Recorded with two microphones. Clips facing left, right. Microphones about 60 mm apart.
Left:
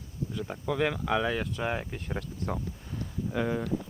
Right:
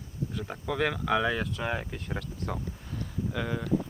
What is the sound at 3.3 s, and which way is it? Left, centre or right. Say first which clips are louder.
Speech: left 4 dB; centre.